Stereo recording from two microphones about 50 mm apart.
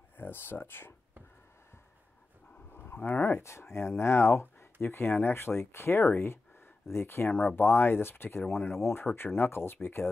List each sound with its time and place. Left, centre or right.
0.2 s speech: left
2.7 s a sound: left
3.3 s speech: left